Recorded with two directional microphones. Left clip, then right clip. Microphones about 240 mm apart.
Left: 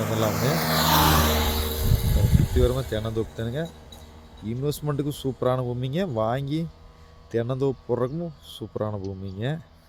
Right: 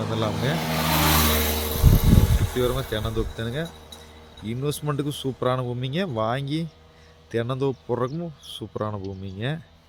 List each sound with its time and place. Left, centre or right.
0.0 s speech: left; by 0.9 s centre
1.0 s a sound: right
2.6 s speech: right
3.3 s speech: centre